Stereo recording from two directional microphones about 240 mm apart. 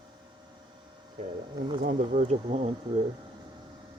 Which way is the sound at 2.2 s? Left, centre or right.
Right.